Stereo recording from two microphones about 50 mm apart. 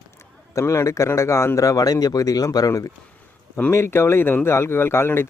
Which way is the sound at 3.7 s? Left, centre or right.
Left.